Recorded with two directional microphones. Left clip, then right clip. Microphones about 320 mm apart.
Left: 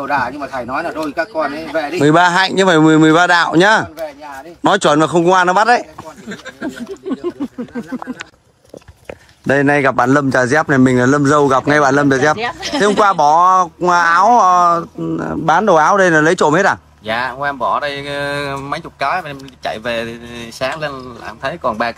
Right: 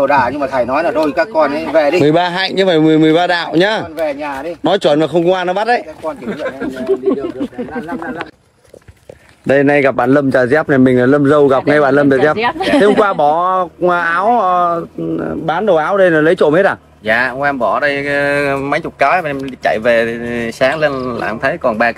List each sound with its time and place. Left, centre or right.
0.0 s speech: centre
2.3 s speech: left
2.8 s speech: centre
3.3 s speech: left
4.6 s speech: centre
9.5 s speech: centre
12.4 s speech: right
12.8 s speech: centre